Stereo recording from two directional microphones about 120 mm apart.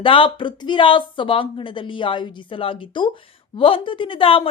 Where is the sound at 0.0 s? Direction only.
45° left (ahead or behind).